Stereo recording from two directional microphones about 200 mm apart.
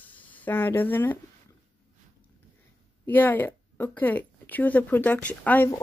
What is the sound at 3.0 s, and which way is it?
Speech, 10° left (ahead or behind).